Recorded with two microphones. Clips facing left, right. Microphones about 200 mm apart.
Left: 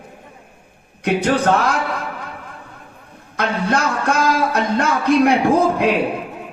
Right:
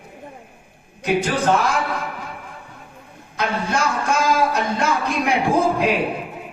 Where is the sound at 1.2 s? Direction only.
60° left (ahead or behind).